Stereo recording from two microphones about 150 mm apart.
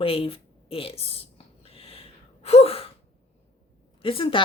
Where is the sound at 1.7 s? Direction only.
40° left (ahead or behind).